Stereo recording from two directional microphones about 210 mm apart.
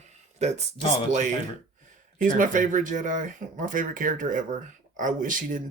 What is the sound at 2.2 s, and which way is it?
Speech, 40° right (ahead or behind).